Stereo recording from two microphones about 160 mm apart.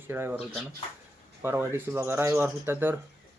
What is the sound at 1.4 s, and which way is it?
Speech, 15° right (ahead or behind).